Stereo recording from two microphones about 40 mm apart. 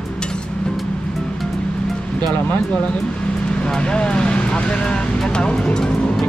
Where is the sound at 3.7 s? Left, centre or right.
Left.